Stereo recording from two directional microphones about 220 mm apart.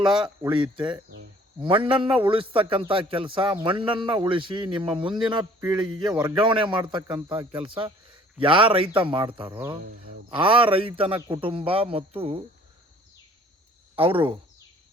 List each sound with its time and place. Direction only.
0.5 s a man's voice: 20° right (ahead or behind)
13.9 s speech: 25° right (ahead or behind)